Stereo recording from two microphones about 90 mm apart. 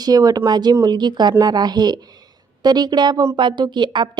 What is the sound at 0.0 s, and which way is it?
Speech, 45° right (ahead or behind).